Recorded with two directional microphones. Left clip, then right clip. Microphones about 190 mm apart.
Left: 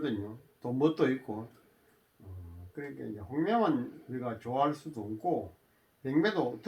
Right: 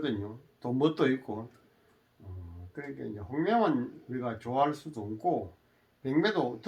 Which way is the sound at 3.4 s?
15° left (ahead or behind).